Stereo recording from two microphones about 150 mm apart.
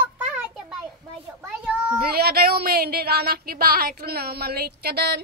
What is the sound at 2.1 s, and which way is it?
Speech, 90° right.